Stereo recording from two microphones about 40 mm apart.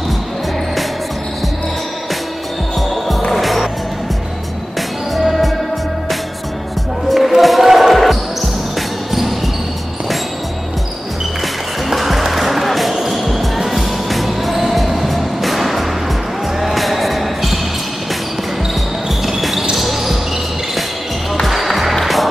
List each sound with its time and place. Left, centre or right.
3.1 s music: centre
5.1 s music: centre
7.1 s basketball bounce: centre
11.9 s music: centre
16.6 s basketball bounce: centre
19.2 s basketball bounce: centre
21.5 s music: centre